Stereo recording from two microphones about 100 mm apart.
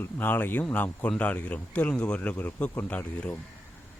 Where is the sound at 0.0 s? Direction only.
20° left (ahead or behind).